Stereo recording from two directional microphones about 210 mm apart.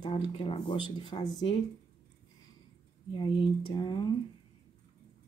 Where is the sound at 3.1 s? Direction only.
25° left (ahead or behind).